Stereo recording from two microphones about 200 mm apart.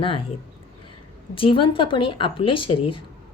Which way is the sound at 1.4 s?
25° left (ahead or behind).